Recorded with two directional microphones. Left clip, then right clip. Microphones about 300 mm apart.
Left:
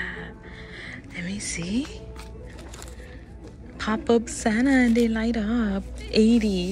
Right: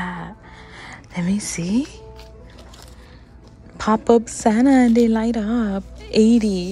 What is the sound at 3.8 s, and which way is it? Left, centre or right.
A woman's voice, centre.